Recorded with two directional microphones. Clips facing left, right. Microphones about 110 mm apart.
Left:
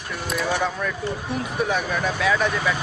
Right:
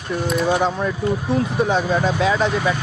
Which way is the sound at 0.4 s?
25° right (ahead or behind).